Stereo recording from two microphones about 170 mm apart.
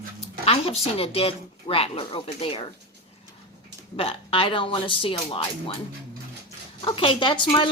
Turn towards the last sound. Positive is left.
turn(degrees=30)  # may be behind; listen again after turning